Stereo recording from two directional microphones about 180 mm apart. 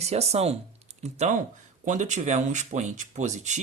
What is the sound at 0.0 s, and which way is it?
Speech, 35° right (ahead or behind).